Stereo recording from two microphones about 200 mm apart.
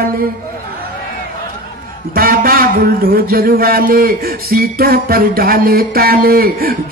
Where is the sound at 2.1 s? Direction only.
45° right (ahead or behind).